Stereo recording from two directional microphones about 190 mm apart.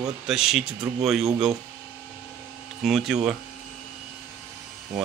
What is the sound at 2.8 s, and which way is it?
Speech, centre (ahead or behind).